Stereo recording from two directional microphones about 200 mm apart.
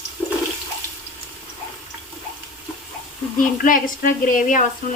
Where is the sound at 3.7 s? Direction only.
40° left (ahead or behind).